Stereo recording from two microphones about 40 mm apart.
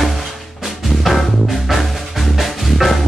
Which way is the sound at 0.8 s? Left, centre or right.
Centre.